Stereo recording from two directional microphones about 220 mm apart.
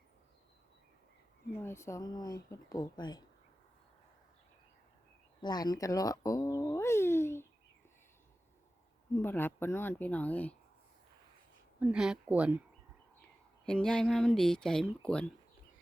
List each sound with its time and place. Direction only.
1.5 s speech: 10° left (ahead or behind)
5.4 s speech: 20° left (ahead or behind)
9.1 s speech: 10° left (ahead or behind)
11.8 s speech: 5° right (ahead or behind)
13.7 s speech: 5° left (ahead or behind)